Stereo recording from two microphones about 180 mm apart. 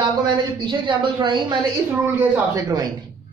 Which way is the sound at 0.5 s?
25° right (ahead or behind).